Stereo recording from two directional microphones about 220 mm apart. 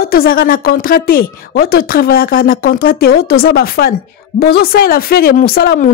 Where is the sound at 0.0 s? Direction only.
45° left (ahead or behind).